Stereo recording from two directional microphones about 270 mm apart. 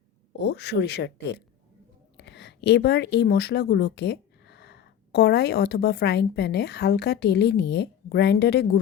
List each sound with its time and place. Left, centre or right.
0.3 s speech: left